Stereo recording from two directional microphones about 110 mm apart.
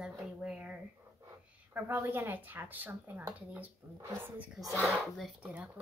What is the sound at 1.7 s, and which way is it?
A woman's voice, 20° right (ahead or behind).